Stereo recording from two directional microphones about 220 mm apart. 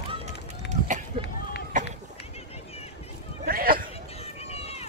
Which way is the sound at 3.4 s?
40° right (ahead or behind).